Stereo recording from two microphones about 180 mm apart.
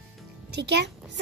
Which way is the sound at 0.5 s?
70° right (ahead or behind).